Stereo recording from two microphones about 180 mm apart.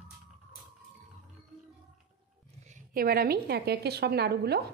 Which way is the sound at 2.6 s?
50° right (ahead or behind).